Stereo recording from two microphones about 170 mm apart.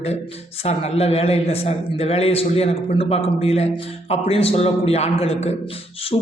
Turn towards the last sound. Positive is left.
turn(degrees=35)  # may be behind; listen again after turning